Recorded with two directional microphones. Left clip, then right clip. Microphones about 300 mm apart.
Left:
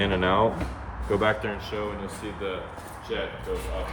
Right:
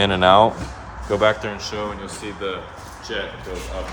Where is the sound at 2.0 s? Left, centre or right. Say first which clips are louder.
Right 4 dB; right.